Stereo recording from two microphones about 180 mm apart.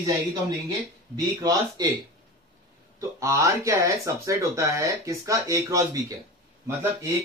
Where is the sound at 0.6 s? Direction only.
20° right (ahead or behind).